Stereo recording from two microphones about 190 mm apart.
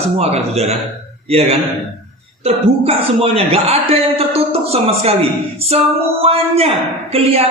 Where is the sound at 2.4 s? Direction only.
30° right (ahead or behind).